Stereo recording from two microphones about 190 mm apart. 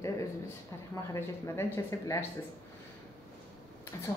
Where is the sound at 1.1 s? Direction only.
15° left (ahead or behind).